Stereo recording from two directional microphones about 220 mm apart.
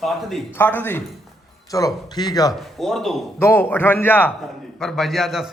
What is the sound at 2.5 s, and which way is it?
A man's voice, centre (ahead or behind).